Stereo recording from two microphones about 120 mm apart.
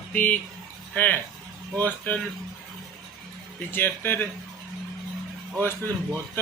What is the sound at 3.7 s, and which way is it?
Speech, 15° left (ahead or behind).